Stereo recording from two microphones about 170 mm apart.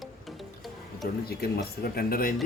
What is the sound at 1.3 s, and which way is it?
Speech, 65° left (ahead or behind).